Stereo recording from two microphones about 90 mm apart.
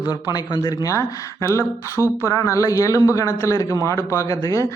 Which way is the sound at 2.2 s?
35° left (ahead or behind).